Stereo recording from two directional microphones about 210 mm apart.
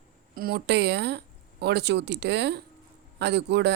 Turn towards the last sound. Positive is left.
turn(degrees=-55)  # may be behind; listen again after turning